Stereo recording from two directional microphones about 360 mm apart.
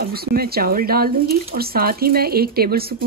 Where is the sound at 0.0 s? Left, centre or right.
Right.